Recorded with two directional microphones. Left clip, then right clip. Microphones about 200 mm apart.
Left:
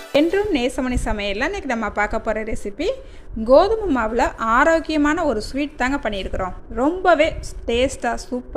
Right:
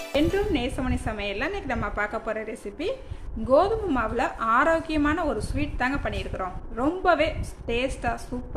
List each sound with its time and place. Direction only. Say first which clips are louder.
0.1 s a woman's voice: left 7 dB; 40° left (ahead or behind)